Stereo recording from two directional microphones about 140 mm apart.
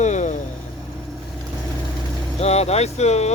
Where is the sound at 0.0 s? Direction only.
60° left (ahead or behind).